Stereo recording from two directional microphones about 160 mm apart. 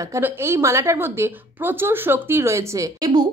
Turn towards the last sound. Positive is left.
turn(degrees=-25)  # may be behind; listen again after turning